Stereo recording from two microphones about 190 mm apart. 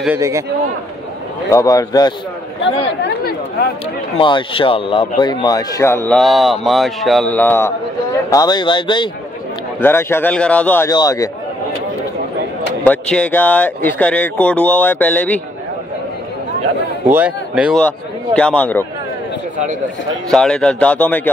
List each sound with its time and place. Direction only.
1.5 s speech: 20° left (ahead or behind)
4.2 s speech: 25° left (ahead or behind)
6.1 s speech: centre (ahead or behind); by 9.1 s 25° left (ahead or behind)
9.8 s speech: 10° left (ahead or behind)
10.9 s speech: 20° left (ahead or behind)
12.8 s speech: 5° left (ahead or behind)
17.1 s a man's voice: 5° right (ahead or behind)
17.7 s speech: 5° left (ahead or behind)
20.2 s speech: 5° left (ahead or behind)